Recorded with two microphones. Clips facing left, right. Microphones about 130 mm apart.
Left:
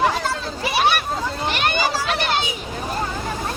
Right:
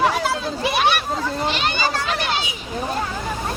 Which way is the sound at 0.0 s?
10° right (ahead or behind).